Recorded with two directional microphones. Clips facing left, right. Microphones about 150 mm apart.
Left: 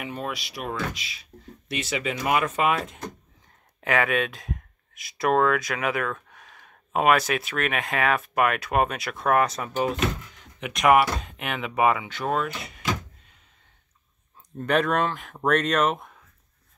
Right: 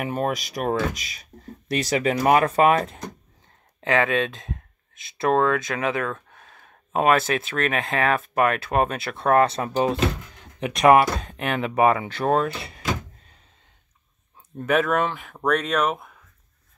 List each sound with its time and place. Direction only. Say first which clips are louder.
0.0 s speech: right 7 dB; 50° right (ahead or behind)
3.8 s speech: right 2 dB; 25° right (ahead or behind)
14.6 s speech: right 2 dB; 5° right (ahead or behind)